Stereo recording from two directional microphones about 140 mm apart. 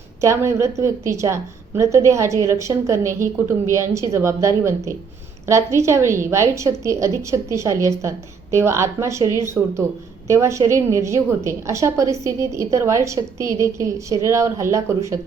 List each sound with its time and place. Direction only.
0.2 s a woman's voice: 20° right (ahead or behind)